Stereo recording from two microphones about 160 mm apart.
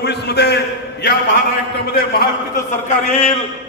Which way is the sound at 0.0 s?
90° left.